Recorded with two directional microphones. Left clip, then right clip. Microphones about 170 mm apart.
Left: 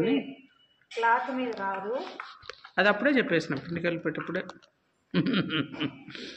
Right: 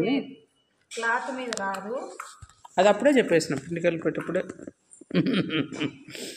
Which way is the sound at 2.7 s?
5° right (ahead or behind).